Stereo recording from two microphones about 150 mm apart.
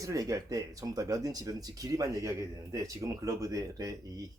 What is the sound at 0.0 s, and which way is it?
Speech, 20° right (ahead or behind).